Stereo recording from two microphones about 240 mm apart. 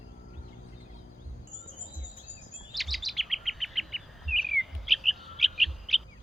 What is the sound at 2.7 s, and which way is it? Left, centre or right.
Chirp, centre.